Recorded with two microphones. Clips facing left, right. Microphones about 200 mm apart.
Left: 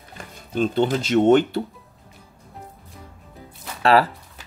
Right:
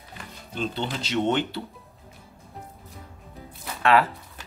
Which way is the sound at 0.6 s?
50° left (ahead or behind).